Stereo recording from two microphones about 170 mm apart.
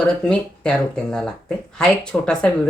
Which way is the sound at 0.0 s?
5° left (ahead or behind).